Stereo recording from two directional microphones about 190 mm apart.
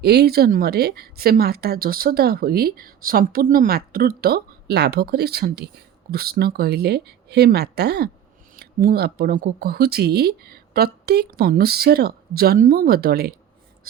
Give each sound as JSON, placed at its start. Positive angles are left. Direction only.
{"t": 0.0, "sound": "a woman's voice", "side_deg": -60}